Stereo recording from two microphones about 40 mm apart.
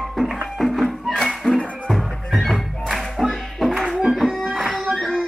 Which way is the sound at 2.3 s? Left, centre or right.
Centre.